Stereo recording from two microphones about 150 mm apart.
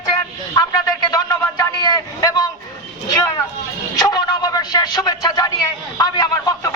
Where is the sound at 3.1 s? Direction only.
20° left (ahead or behind).